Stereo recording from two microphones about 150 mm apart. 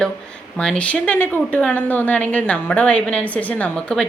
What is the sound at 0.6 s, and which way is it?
A woman's voice, 5° left (ahead or behind).